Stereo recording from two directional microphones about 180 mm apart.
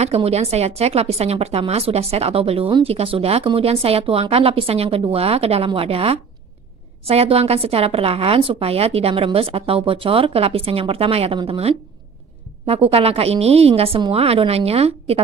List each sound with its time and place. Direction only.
0.0 s a woman's voice: 35° right (ahead or behind)